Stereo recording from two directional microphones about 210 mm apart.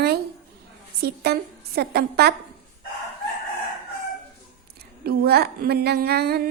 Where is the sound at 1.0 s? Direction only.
50° right (ahead or behind).